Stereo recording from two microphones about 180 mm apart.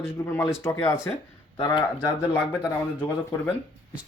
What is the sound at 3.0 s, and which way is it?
Speech, 15° left (ahead or behind).